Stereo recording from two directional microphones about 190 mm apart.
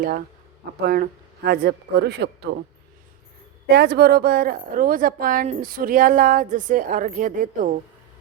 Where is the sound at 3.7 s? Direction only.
60° right (ahead or behind).